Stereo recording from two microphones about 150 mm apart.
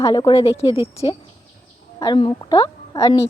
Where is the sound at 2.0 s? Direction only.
30° left (ahead or behind).